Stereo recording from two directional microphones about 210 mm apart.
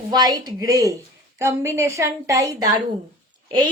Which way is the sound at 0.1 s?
20° right (ahead or behind).